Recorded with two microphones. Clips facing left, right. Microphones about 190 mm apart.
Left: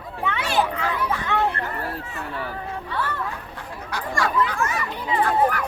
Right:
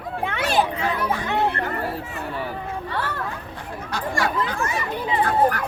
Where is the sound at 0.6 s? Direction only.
25° right (ahead or behind).